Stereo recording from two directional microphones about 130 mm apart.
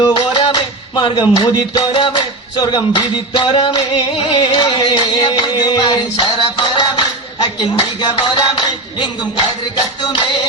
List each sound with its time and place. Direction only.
0.0 s music: 40° left (ahead or behind)
7.4 s speech: 35° left (ahead or behind)